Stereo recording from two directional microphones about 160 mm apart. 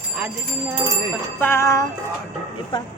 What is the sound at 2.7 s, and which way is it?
Speech, 30° left (ahead or behind).